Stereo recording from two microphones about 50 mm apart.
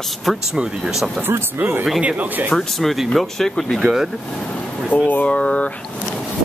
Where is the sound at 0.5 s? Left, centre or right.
Centre.